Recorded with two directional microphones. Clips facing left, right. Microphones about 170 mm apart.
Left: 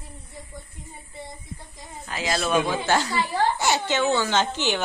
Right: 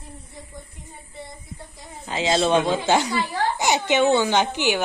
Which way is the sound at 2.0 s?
25° right (ahead or behind).